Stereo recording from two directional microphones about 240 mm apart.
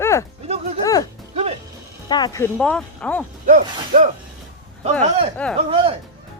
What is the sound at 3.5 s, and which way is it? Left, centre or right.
Speech, right.